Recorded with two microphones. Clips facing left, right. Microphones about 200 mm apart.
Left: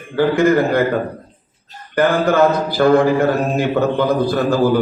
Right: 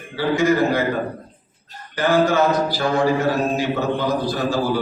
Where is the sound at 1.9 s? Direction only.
60° left (ahead or behind).